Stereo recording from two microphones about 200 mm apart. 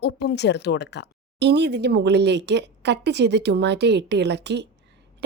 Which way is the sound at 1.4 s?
60° right (ahead or behind).